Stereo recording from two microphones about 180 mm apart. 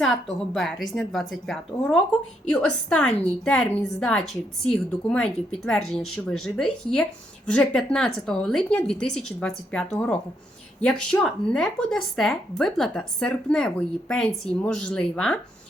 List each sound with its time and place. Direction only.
0.0 s speech: centre (ahead or behind)